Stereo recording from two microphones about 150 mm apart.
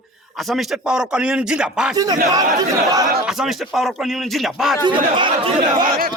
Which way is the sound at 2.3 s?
25° right (ahead or behind).